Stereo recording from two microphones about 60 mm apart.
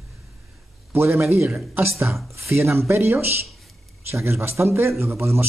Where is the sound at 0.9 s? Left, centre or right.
Right.